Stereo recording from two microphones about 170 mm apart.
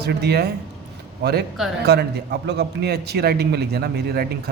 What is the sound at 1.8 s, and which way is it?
A man's voice, 70° right (ahead or behind).